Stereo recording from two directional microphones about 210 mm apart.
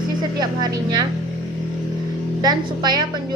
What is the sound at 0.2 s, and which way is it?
Speech, 20° right (ahead or behind).